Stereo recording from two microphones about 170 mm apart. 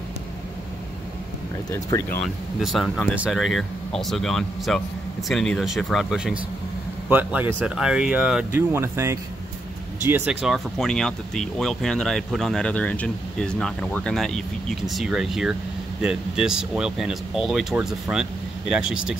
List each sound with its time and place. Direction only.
1.7 s speech: 20° left (ahead or behind)
2.2 s speech: centre (ahead or behind)